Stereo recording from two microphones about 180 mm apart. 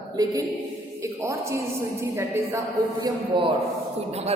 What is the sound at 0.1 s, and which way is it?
A man's voice, 20° right (ahead or behind).